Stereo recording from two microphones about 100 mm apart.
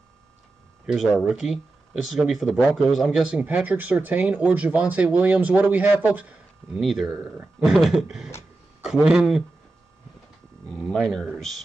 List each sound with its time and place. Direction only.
0.8 s speech: centre (ahead or behind); by 6.8 s 15° right (ahead or behind)
6.8 s speech: centre (ahead or behind)
7.1 s speech: 20° right (ahead or behind)
7.6 s speech: 5° right (ahead or behind)
10.7 s speech: 10° left (ahead or behind)